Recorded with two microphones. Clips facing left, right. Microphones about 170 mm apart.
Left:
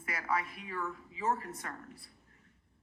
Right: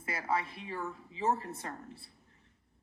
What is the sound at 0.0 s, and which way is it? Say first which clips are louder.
A woman's voice: right 1 dB; 30° right (ahead or behind).